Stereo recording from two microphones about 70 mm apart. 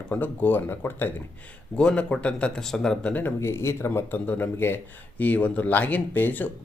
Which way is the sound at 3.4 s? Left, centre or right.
Left.